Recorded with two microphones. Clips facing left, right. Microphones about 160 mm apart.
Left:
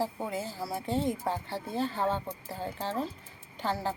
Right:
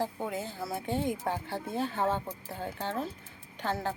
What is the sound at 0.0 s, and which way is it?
Speech, 5° left (ahead or behind).